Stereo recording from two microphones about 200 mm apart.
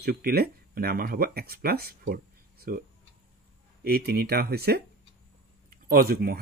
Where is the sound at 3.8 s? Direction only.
50° right (ahead or behind).